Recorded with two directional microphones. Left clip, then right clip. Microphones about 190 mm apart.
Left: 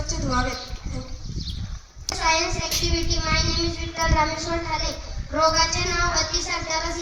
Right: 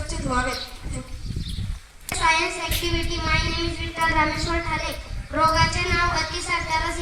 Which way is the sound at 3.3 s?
60° left (ahead or behind).